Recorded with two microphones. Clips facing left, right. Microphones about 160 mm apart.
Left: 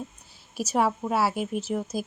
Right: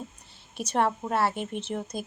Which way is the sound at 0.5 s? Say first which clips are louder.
Left 1 dB; 5° left (ahead or behind).